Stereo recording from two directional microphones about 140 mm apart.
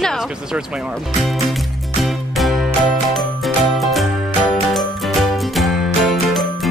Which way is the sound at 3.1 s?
Centre (ahead or behind).